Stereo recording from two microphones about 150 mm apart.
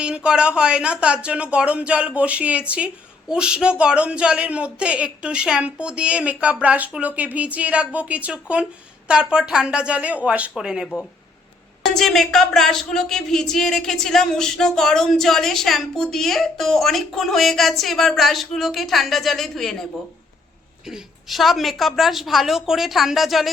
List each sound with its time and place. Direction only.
0.0 s speech: 5° right (ahead or behind)
20.8 s speech: centre (ahead or behind)